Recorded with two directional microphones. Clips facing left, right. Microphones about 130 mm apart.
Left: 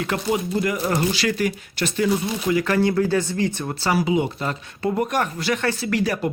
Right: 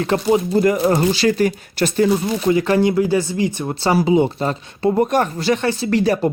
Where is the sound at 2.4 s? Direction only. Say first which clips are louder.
Right 4 dB; 25° right (ahead or behind).